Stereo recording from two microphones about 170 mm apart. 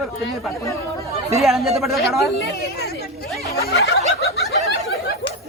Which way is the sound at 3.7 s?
70° left (ahead or behind).